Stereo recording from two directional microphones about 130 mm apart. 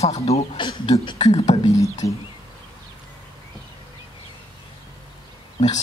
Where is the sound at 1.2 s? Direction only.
55° left (ahead or behind).